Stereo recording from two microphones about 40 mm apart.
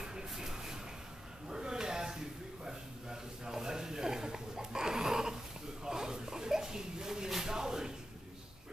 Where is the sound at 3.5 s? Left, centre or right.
Centre.